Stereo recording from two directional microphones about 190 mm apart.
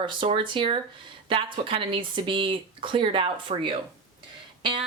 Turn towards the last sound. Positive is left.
turn(degrees=-25)  # may be behind; listen again after turning